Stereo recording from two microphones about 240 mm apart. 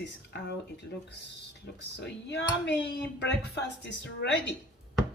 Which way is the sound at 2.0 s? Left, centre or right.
Left.